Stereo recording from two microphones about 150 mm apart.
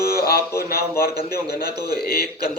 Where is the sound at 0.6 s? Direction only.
90° left.